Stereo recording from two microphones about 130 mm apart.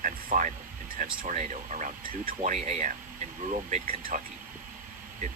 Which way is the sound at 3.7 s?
90° right.